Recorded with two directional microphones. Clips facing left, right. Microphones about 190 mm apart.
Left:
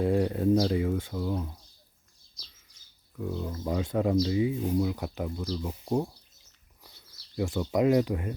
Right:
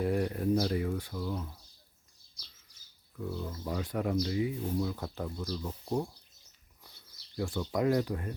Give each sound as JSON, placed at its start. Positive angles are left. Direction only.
{"t": 0.0, "sound": "speech", "side_deg": 25}
{"t": 3.2, "sound": "speech", "side_deg": 20}
{"t": 7.3, "sound": "speech", "side_deg": 20}